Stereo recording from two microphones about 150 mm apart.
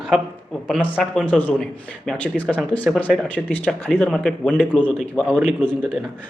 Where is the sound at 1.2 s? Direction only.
10° left (ahead or behind).